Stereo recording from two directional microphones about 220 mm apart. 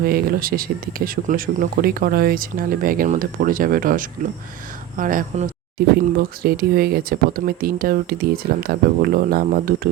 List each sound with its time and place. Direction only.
0.0 s speech: 45° right (ahead or behind)